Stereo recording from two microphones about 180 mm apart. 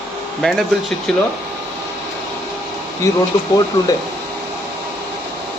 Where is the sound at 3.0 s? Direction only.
15° left (ahead or behind).